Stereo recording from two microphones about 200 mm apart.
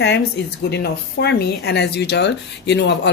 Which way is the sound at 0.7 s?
55° left (ahead or behind).